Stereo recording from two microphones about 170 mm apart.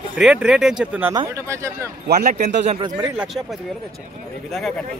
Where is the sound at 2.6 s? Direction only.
35° right (ahead or behind).